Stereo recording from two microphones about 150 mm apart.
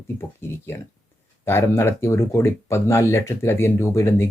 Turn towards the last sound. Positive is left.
turn(degrees=15)  # may be behind; listen again after turning